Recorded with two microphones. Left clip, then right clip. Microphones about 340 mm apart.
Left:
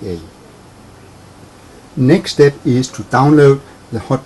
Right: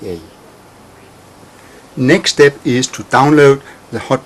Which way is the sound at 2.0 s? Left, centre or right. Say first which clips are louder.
Right 2 dB; left.